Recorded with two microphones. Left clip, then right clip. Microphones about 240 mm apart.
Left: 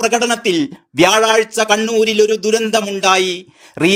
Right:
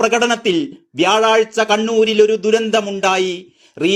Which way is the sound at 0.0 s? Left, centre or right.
Left.